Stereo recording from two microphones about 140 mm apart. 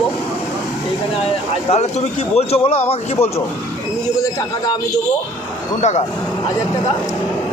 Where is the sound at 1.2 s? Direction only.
45° left (ahead or behind).